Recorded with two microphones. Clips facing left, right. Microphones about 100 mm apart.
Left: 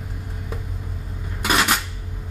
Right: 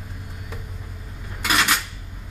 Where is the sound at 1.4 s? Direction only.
20° left (ahead or behind).